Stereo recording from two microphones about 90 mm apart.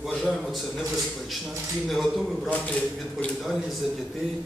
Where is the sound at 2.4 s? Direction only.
15° left (ahead or behind).